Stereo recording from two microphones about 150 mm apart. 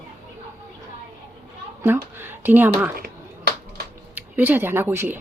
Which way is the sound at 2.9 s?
90° right.